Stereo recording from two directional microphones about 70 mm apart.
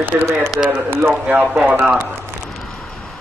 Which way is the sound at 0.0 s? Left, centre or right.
Right.